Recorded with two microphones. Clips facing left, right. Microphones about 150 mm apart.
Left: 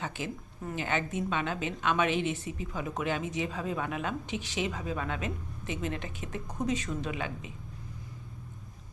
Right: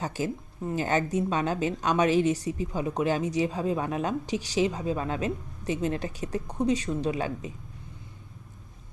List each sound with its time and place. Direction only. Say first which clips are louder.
0.0 s a woman's voice: right 6 dB; 40° right (ahead or behind)